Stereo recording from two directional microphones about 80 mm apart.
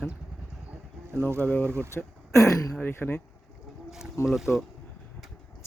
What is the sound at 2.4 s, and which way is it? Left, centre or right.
Speech, left.